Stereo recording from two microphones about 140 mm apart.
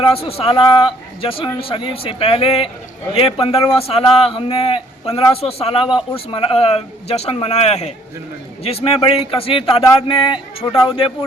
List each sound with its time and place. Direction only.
0.0 s speech: 45° left (ahead or behind)